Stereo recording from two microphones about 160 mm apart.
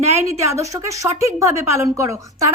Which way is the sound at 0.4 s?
20° right (ahead or behind).